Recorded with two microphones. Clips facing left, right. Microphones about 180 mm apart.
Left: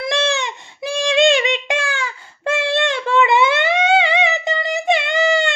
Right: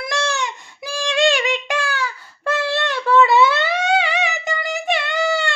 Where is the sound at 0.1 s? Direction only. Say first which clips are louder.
Left 2 dB; 20° left (ahead or behind).